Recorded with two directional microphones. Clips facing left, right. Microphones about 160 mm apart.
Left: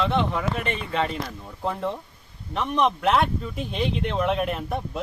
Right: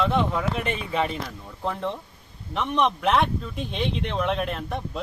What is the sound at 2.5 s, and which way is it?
Speech, centre (ahead or behind).